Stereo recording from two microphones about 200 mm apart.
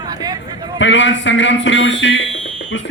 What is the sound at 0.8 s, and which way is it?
A man's voice, 65° left (ahead or behind).